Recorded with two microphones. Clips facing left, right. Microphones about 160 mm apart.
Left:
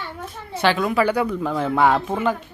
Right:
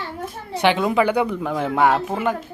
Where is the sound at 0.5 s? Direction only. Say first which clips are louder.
Right 1 dB; 15° right (ahead or behind).